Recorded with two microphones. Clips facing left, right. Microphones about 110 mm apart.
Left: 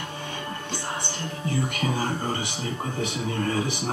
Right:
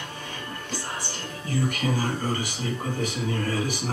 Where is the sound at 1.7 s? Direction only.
30° left (ahead or behind).